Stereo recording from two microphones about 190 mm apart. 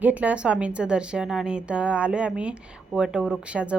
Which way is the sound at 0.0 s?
10° right (ahead or behind).